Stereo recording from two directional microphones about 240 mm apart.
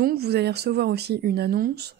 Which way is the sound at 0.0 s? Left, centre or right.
Right.